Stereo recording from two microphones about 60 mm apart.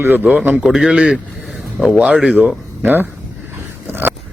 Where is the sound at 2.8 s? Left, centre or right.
Right.